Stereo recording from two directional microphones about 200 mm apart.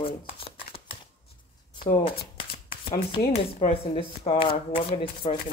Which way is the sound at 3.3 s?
30° left (ahead or behind).